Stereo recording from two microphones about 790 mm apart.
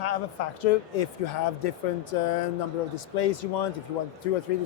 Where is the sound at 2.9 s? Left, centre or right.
Left.